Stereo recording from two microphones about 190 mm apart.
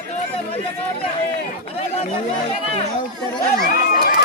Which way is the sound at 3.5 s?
55° left (ahead or behind).